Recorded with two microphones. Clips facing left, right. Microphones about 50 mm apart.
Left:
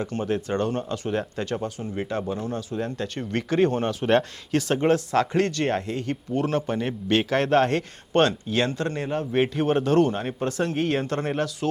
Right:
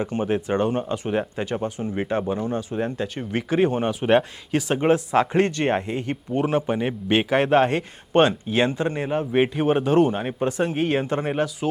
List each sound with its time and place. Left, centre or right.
0.0 s speech: centre
2.9 s speech: centre